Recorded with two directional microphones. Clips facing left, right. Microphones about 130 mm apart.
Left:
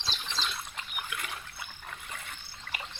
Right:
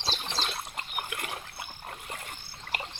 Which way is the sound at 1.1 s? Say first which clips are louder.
Right 2 dB; 50° right (ahead or behind).